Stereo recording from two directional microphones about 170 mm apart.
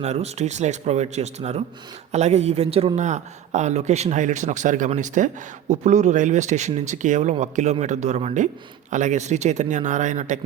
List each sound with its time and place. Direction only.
0.0 s a man's voice: 40° right (ahead or behind)